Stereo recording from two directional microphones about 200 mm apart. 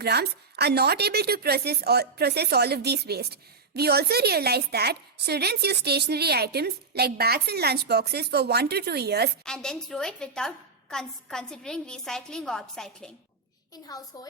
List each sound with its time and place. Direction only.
0.0 s a woman's voice: 55° right (ahead or behind)
9.4 s a woman's voice: 5° left (ahead or behind)
13.8 s a woman's voice: 20° left (ahead or behind)